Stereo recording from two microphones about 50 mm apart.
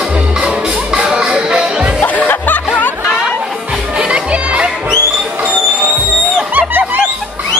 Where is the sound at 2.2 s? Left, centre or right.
Left.